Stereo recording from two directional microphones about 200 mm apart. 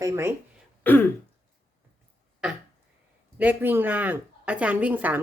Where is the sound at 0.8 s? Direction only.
10° left (ahead or behind).